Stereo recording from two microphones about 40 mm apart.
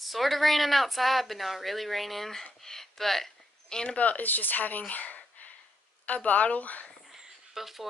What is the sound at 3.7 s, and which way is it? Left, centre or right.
Speech, centre.